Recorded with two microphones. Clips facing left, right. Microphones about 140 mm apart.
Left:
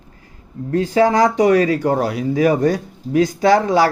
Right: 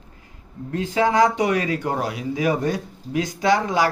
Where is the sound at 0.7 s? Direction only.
40° left (ahead or behind).